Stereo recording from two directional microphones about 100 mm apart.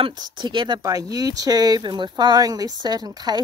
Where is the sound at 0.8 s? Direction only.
35° right (ahead or behind).